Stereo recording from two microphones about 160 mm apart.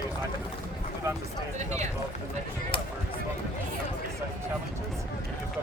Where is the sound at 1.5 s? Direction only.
45° right (ahead or behind).